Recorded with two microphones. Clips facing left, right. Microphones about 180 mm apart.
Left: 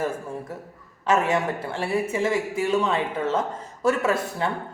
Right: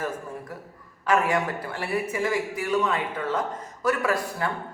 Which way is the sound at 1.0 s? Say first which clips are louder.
Left 1 dB; 25° left (ahead or behind).